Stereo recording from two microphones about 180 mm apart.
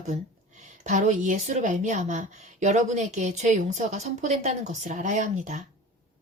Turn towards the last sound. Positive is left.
turn(degrees=-40)  # may be behind; listen again after turning